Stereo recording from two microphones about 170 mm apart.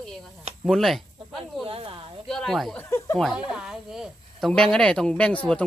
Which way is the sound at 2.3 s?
5° left (ahead or behind).